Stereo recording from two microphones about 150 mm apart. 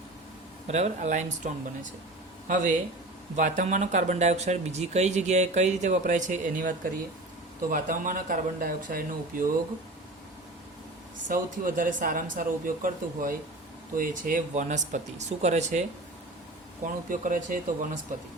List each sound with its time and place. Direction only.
0.7 s a man's voice: 50° right (ahead or behind); by 9.5 s 65° right (ahead or behind)
11.3 s a man's voice: 60° right (ahead or behind)
16.8 s a man's voice: 65° right (ahead or behind)